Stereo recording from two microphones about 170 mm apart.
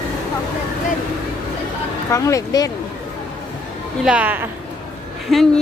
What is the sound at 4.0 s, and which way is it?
A woman's voice, 5° right (ahead or behind).